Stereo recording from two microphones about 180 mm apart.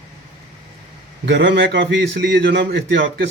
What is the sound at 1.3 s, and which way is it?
A man's voice, 85° right.